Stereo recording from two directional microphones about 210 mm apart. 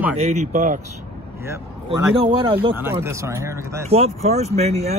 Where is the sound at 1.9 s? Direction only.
25° right (ahead or behind).